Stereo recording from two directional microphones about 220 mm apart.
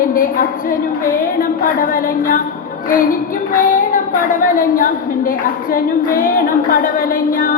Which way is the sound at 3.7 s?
40° left (ahead or behind).